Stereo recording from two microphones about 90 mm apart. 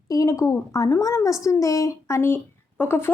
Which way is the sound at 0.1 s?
40° left (ahead or behind).